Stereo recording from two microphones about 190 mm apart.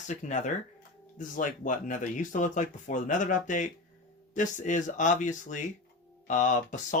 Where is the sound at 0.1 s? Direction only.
40° left (ahead or behind).